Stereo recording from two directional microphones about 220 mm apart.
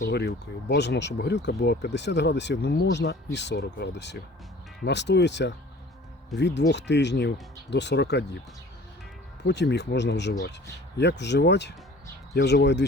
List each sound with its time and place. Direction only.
0.0 s speech: 50° left (ahead or behind)
9.5 s speech: 50° left (ahead or behind)